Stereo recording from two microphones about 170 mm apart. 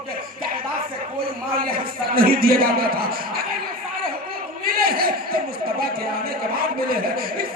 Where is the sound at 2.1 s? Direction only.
60° right (ahead or behind).